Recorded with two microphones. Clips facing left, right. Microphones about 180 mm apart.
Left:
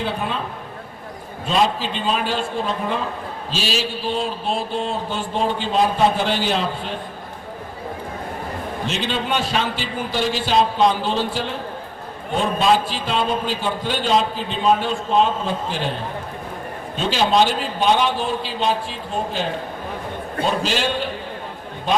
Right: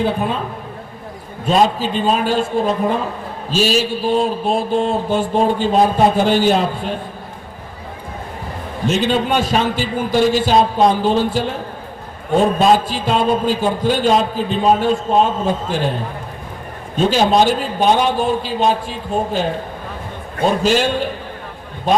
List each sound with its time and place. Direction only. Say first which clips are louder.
0.0 s a man's voice: right 6 dB; 45° right (ahead or behind)
1.5 s a man's voice: right 5 dB; 45° right (ahead or behind)
8.9 s a man's voice: right 8 dB; 45° right (ahead or behind)
17.0 s a man's voice: right 4 dB; 45° right (ahead or behind)